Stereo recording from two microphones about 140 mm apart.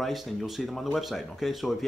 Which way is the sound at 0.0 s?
Centre (ahead or behind).